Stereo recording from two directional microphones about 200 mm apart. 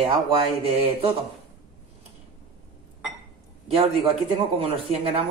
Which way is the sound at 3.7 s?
30° right (ahead or behind).